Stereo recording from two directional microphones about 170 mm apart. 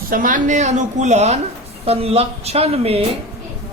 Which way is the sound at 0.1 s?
55° right (ahead or behind).